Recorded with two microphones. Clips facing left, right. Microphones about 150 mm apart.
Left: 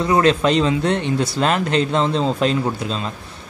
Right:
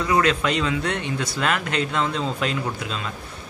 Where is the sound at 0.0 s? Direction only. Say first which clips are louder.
Left 5 dB; 30° left (ahead or behind).